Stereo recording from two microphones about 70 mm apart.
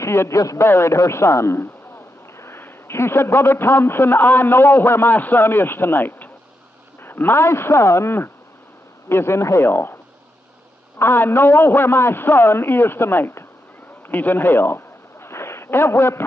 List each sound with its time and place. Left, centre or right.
0.0 s a man's voice: left
11.0 s a man's voice: left
14.0 s a sound: left